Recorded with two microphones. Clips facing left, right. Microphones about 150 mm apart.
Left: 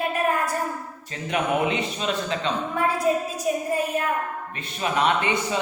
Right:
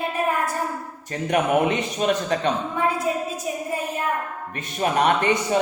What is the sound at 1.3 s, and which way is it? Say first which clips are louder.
A man's voice: right 3 dB; 45° right (ahead or behind).